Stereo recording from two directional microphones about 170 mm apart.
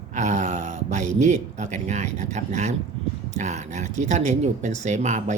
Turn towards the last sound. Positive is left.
turn(degrees=-45)  # may be behind; listen again after turning